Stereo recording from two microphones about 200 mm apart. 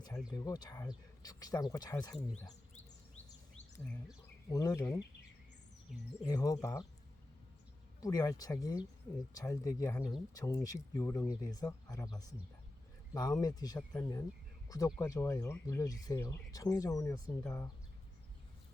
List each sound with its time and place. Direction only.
0.3 s speech: 20° left (ahead or behind)
4.5 s speech: 15° left (ahead or behind)
5.9 s speech: centre (ahead or behind)
6.2 s speech: 15° left (ahead or behind)
8.0 s speech: 20° left (ahead or behind)
13.4 s speech: 20° left (ahead or behind)